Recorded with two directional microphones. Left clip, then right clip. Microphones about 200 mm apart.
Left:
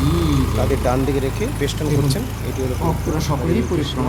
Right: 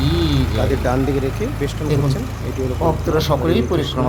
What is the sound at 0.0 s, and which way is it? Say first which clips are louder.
Vehicle: right 1 dB; 30° right (ahead or behind).